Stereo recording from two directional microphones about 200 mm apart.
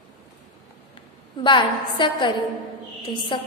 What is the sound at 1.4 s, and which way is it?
A woman's voice, 25° left (ahead or behind).